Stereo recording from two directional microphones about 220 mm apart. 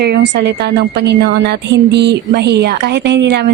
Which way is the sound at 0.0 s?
50° right (ahead or behind).